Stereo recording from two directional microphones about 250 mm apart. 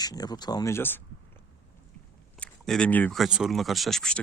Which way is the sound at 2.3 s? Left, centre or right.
Centre.